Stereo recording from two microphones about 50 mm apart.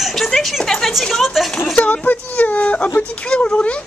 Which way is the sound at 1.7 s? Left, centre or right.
Left.